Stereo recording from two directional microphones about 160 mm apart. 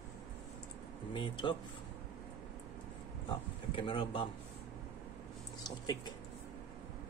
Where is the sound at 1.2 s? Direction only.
30° left (ahead or behind).